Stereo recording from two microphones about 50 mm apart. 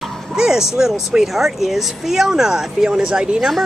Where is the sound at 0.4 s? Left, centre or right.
Centre.